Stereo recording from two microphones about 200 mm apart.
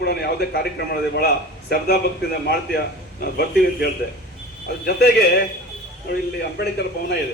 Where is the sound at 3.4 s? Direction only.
50° left (ahead or behind).